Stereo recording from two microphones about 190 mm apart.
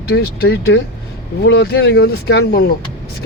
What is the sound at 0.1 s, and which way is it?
Speech, 60° left (ahead or behind).